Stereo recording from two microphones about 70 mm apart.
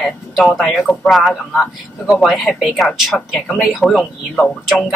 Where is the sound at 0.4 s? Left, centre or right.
Centre.